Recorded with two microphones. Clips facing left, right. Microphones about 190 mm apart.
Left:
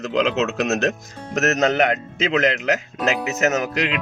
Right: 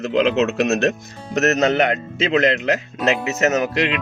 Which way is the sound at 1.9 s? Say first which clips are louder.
Right 2 dB; 30° right (ahead or behind).